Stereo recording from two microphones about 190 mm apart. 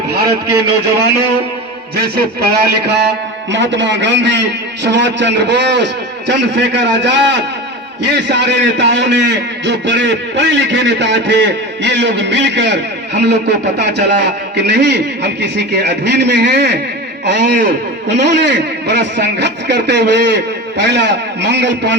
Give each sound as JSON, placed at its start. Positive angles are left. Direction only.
{"t": 0.1, "sound": "a man's voice", "side_deg": -55}